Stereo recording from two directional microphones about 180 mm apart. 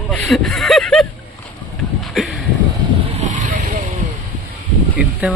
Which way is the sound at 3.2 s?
45° right (ahead or behind).